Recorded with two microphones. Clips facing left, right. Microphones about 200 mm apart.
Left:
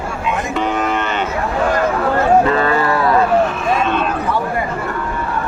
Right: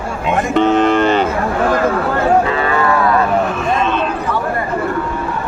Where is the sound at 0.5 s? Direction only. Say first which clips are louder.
Right 9 dB; 25° right (ahead or behind).